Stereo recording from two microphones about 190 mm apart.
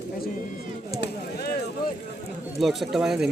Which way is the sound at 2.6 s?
Centre (ahead or behind).